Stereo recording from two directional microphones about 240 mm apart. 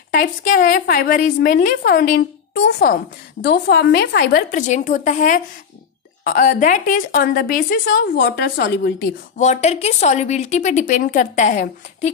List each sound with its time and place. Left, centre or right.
0.1 s a woman's voice: left
9.4 s a woman's voice: left